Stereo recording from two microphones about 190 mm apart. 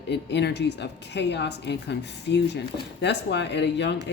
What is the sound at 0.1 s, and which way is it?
Speech, 65° left (ahead or behind).